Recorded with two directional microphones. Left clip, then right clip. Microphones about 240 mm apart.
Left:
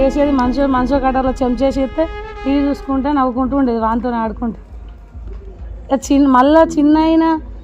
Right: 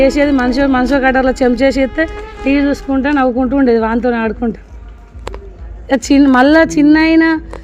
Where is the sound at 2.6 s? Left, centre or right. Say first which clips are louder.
Right 2 dB; right.